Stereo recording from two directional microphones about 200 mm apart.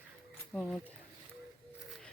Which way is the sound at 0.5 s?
5° left (ahead or behind).